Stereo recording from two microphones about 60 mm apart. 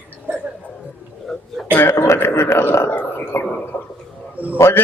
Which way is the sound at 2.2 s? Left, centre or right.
Left.